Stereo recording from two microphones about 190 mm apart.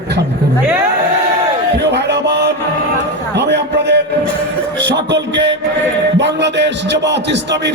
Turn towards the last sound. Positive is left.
turn(degrees=-65)  # may be behind; listen again after turning